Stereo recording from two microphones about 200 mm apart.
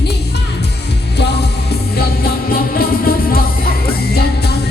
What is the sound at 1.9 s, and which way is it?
Music, 50° left (ahead or behind).